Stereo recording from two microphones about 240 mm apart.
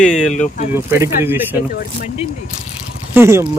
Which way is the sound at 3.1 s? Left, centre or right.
Centre.